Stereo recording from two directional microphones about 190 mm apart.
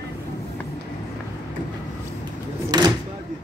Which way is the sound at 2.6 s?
20° right (ahead or behind).